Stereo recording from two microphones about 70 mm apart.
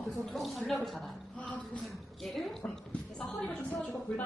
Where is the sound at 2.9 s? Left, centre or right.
Centre.